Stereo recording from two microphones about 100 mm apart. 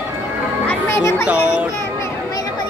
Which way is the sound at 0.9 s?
25° left (ahead or behind).